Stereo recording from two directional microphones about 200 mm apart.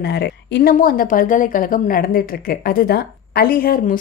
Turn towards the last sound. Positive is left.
turn(degrees=45)  # may be behind; listen again after turning